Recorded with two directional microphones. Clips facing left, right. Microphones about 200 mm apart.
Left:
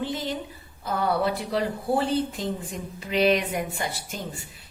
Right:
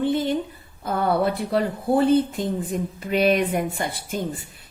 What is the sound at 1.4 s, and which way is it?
A woman's voice, 50° right (ahead or behind).